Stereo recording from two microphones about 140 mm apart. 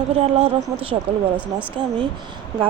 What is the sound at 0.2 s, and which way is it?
Speech, 45° right (ahead or behind).